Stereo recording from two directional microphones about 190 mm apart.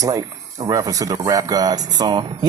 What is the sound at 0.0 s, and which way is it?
Speech, 20° right (ahead or behind).